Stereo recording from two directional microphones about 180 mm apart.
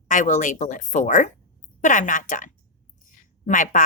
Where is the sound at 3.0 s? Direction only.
45° left (ahead or behind).